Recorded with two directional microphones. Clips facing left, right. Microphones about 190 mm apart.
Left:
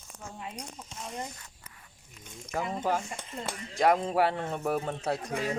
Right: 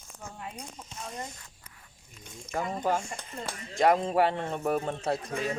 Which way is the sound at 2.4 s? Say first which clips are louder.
Right 1 dB; 10° left (ahead or behind).